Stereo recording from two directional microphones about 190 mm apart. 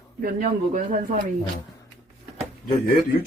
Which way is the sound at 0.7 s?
40° right (ahead or behind).